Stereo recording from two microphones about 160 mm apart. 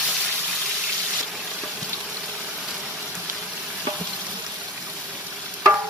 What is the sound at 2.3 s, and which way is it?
Vehicle, centre (ahead or behind).